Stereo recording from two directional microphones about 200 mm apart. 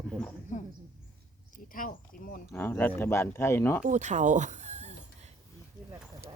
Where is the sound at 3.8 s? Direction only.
35° right (ahead or behind).